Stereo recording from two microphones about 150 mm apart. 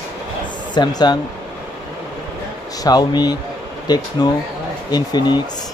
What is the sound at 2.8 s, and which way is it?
Speech, 25° left (ahead or behind).